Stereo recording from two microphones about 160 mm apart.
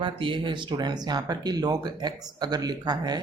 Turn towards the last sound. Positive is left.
turn(degrees=-25)  # may be behind; listen again after turning